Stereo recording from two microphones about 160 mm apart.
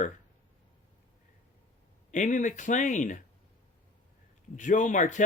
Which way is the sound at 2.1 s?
50° left (ahead or behind).